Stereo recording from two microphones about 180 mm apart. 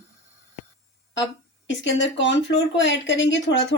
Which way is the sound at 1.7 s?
90° left.